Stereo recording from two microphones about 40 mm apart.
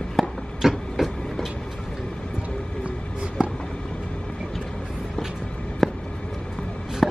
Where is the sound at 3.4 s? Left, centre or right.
Right.